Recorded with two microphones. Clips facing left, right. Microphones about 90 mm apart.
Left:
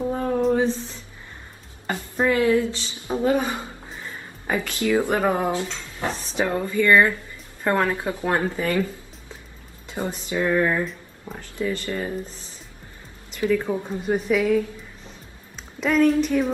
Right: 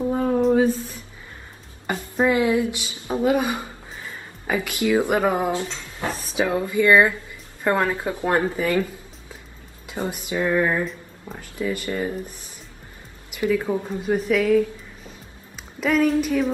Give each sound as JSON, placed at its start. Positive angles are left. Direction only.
{"t": 0.0, "sound": "a sound", "side_deg": -5}
{"t": 1.9, "sound": "a sound", "side_deg": -10}
{"t": 4.5, "sound": "speech", "side_deg": -15}
{"t": 5.2, "sound": "a woman's voice", "side_deg": -5}
{"t": 5.6, "sound": "speech", "side_deg": -20}
{"t": 6.0, "sound": "speech", "side_deg": 30}
{"t": 6.3, "sound": "speech", "side_deg": -5}
{"t": 7.6, "sound": "a woman's voice", "side_deg": -5}
{"t": 8.0, "sound": "speech", "side_deg": -20}
{"t": 10.3, "sound": "speech", "side_deg": -15}
{"t": 10.9, "sound": "a sound", "side_deg": 0}
{"t": 11.5, "sound": "speech", "side_deg": -15}
{"t": 13.5, "sound": "a woman's voice", "side_deg": -5}